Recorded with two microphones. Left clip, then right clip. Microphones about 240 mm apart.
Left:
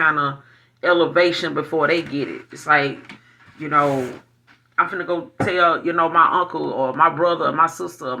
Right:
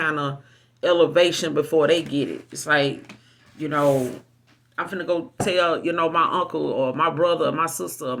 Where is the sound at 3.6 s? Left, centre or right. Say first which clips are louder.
Left 6 dB; right.